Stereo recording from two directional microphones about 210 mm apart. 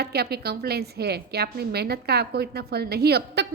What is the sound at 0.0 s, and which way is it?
A woman's voice, 50° right (ahead or behind).